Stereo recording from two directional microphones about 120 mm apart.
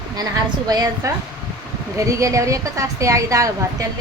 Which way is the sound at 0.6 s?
30° right (ahead or behind).